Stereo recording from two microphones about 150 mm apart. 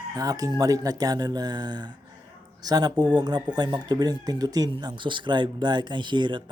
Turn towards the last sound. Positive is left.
turn(degrees=-30)  # may be behind; listen again after turning